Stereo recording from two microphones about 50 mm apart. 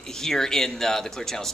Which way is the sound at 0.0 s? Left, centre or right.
Centre.